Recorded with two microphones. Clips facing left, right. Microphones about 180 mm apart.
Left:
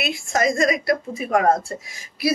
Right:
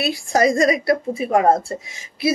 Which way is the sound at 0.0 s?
35° right (ahead or behind).